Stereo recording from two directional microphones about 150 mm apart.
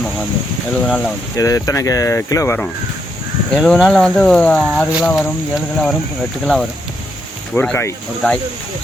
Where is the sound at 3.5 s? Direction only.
Centre (ahead or behind).